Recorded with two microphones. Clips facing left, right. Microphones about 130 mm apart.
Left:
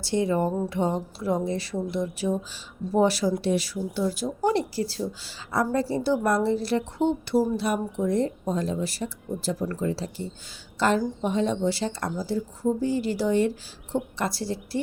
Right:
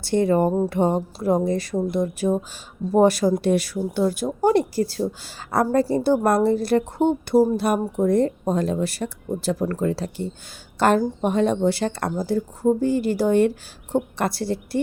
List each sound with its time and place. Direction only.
0.0 s a woman's voice: 55° right (ahead or behind)